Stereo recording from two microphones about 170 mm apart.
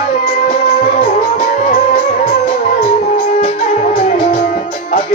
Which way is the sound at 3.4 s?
45° left (ahead or behind).